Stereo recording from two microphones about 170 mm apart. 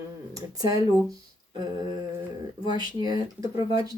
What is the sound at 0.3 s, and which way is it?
Speech, 20° right (ahead or behind).